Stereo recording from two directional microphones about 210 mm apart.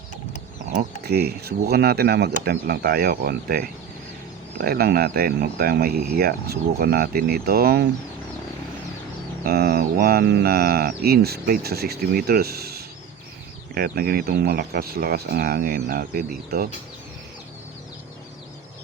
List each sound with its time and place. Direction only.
0.8 s mantra: 50° right (ahead or behind)
9.4 s mantra: 50° right (ahead or behind)